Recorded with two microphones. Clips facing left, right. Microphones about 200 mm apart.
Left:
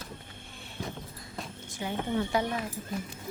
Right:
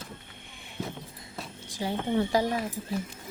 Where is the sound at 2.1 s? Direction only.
35° right (ahead or behind).